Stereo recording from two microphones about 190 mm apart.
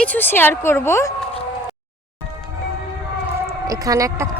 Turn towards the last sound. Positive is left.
turn(degrees=-15)  # may be behind; listen again after turning